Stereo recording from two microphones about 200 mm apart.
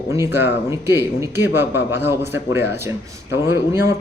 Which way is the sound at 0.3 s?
10° right (ahead or behind).